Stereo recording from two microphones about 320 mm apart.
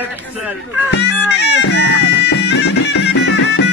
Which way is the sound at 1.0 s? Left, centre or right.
Left.